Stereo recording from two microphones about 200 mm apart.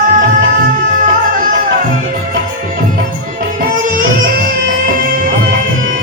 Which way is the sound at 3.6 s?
40° right (ahead or behind).